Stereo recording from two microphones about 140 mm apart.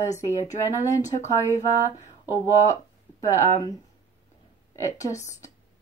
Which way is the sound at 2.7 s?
20° left (ahead or behind).